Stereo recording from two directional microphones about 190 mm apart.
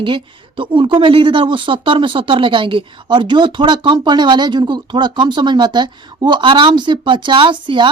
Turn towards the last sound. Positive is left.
turn(degrees=-25)  # may be behind; listen again after turning